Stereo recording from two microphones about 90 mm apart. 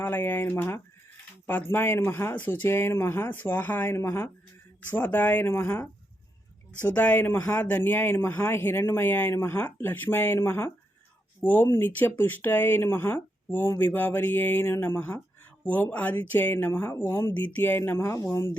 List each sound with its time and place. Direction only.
0.0 s speech: 25° left (ahead or behind)
4.9 s speech: 20° left (ahead or behind)
17.3 s speech: 15° left (ahead or behind)